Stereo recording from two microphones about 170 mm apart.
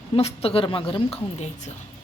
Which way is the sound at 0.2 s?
35° left (ahead or behind).